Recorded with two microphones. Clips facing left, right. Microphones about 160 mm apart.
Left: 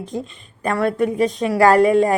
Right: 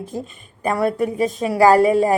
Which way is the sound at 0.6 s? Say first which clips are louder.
Even; 10° right (ahead or behind).